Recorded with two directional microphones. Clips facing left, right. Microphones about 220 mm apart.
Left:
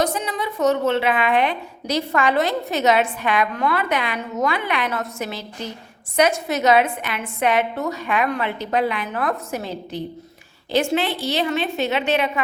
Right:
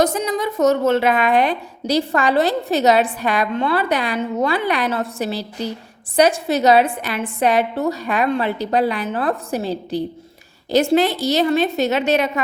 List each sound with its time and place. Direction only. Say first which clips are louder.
0.0 s a woman's voice: right 4 dB; 45° right (ahead or behind)